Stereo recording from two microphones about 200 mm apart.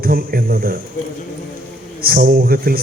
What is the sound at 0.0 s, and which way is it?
Speech, 50° right (ahead or behind).